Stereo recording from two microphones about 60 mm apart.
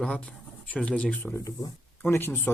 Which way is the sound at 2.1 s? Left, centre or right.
Left.